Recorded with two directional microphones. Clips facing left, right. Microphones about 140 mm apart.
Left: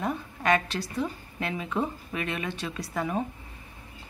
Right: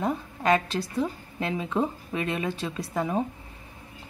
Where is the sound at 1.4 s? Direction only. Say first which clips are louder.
Right 3 dB; 30° right (ahead or behind).